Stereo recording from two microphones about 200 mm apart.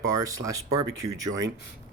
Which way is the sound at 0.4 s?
20° right (ahead or behind).